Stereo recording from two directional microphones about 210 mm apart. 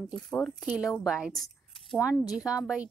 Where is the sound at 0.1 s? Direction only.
Centre (ahead or behind).